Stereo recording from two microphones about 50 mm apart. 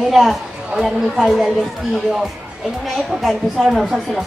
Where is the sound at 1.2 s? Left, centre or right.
Centre.